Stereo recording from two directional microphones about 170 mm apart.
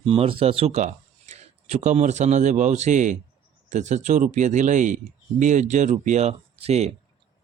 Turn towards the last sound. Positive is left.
turn(degrees=-40)  # may be behind; listen again after turning